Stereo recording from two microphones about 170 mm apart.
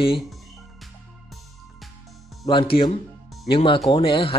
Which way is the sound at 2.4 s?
30° left (ahead or behind).